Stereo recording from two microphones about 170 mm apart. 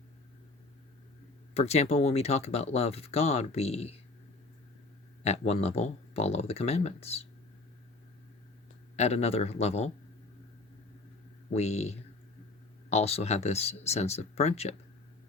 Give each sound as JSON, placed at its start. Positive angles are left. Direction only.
{"t": 1.5, "sound": "speech", "side_deg": 40}
{"t": 5.2, "sound": "speech", "side_deg": 40}
{"t": 9.0, "sound": "speech", "side_deg": 40}
{"t": 11.5, "sound": "speech", "side_deg": 40}